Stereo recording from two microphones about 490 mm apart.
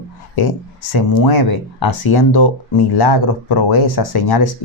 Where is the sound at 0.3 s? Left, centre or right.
Left.